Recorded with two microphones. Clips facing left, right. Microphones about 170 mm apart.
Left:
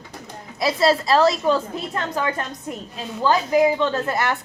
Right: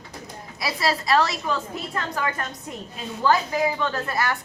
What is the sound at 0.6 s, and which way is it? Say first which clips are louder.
Speech: left 7 dB; 25° left (ahead or behind).